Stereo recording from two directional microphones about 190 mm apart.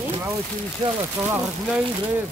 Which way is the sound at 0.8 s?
25° right (ahead or behind).